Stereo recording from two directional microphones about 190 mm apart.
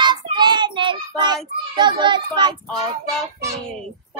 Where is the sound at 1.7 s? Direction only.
25° right (ahead or behind).